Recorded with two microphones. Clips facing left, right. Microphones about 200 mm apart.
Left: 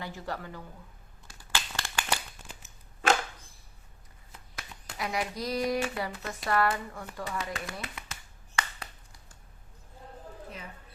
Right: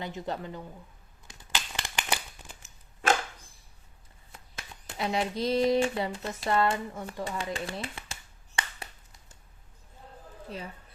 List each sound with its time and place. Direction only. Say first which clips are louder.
0.0 s speech: right 3 dB; 20° right (ahead or behind)
1.3 s a sound: left 1 dB; 15° right (ahead or behind)
4.5 s speech: right 2 dB; 25° right (ahead or behind)